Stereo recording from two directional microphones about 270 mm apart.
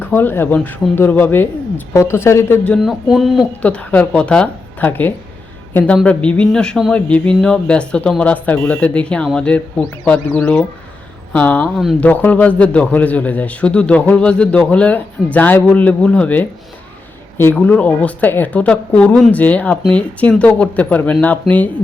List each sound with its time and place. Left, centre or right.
0.0 s a man's voice: centre